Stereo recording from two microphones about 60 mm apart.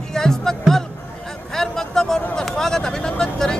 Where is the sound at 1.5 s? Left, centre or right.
Centre.